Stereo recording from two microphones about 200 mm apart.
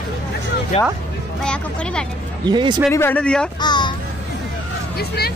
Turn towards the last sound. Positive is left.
turn(degrees=50)  # may be behind; listen again after turning